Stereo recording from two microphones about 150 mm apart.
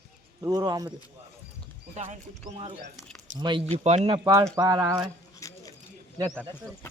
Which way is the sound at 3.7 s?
45° right (ahead or behind).